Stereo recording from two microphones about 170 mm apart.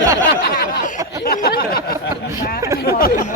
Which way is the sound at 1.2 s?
60° left (ahead or behind).